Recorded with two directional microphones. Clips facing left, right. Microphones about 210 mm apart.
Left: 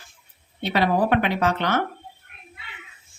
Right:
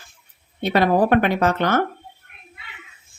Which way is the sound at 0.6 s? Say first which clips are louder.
Right 4 dB; 50° right (ahead or behind).